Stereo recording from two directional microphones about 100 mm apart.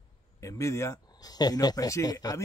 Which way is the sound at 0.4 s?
30° left (ahead or behind).